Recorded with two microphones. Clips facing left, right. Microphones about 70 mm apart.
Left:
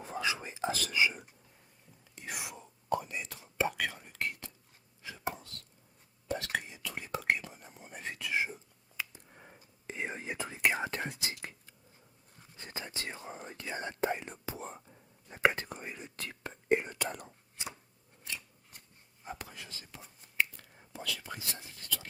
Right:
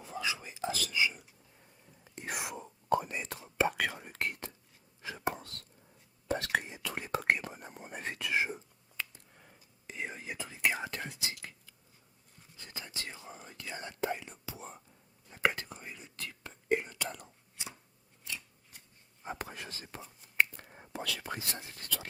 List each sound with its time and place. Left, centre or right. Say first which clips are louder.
0.0 s whispering: left 2 dB; left
0.4 s whispering: left 2 dB; left
2.1 s whispering: right 4 dB; right
5.0 s chopping: right 3 dB; right
6.2 s whispering: right 3 dB; right
9.0 s a sound: even; centre
9.3 s whispering: left 4 dB; left
19.4 s whispering: right 5 dB; right
20.9 s whispering: right 2 dB; right